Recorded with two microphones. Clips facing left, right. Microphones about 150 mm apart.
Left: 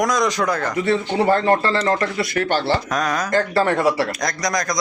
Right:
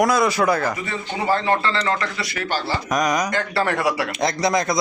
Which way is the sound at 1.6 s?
40° left (ahead or behind).